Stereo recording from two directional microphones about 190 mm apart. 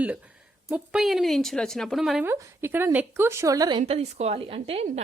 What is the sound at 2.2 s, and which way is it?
A woman's voice, 10° right (ahead or behind).